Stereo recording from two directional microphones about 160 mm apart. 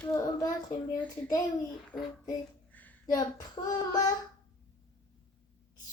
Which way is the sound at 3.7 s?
25° left (ahead or behind).